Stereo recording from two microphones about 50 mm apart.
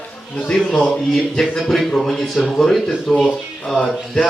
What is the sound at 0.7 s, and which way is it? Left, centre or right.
Speech, left.